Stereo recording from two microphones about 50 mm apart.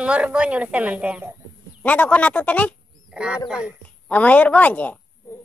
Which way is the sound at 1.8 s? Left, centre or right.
Left.